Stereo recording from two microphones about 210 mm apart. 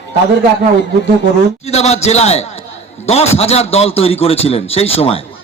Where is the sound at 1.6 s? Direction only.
30° left (ahead or behind).